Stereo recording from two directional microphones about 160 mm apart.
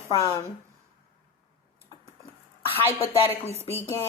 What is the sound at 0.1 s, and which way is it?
Speech, 20° left (ahead or behind).